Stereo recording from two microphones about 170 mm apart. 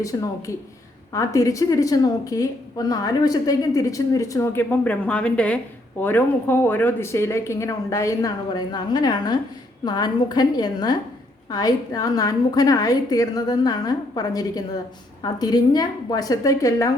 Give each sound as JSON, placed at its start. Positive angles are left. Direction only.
{"t": 0.0, "sound": "a woman's voice", "side_deg": 20}